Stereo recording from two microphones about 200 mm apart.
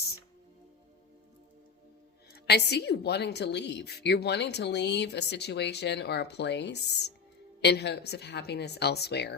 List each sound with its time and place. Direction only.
2.3 s a woman's voice: 55° left (ahead or behind)